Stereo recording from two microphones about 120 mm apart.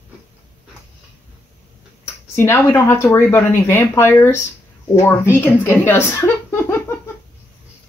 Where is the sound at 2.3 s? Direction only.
20° left (ahead or behind).